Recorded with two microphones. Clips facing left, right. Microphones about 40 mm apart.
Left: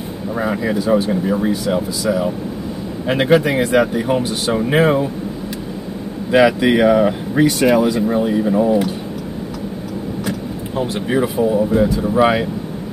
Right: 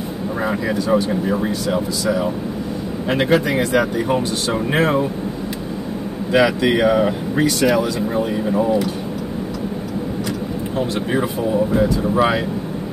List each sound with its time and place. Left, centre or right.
0.4 s speech: centre
0.7 s speech: centre
1.2 s speech: centre
6.3 s speech: centre
10.8 s speech: centre